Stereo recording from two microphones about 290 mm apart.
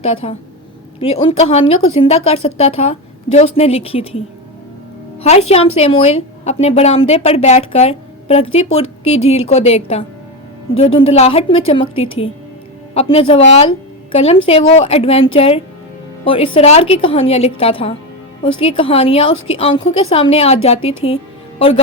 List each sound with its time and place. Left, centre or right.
0.0 s speech: left
5.2 s a woman's voice: left